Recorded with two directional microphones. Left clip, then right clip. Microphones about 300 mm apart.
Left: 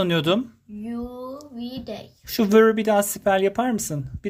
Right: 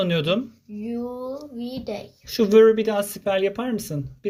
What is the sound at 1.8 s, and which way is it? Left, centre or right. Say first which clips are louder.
Speech: right 3 dB; left.